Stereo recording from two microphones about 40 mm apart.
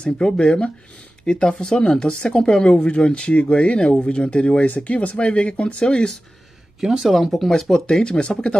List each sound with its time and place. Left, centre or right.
0.0 s speech: left
4.6 s speech: left
5.9 s speech: centre
6.8 s speech: centre
7.1 s speech: centre
8.0 s speech: left